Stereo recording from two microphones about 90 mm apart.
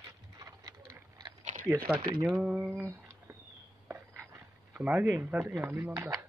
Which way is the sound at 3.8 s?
25° right (ahead or behind).